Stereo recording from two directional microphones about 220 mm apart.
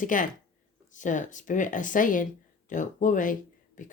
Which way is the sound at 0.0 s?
35° left (ahead or behind).